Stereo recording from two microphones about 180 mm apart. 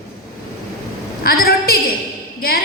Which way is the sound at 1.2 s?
55° left (ahead or behind).